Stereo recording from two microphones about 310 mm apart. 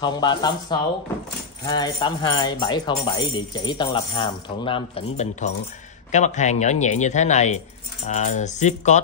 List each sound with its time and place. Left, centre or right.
0.0 s speech: centre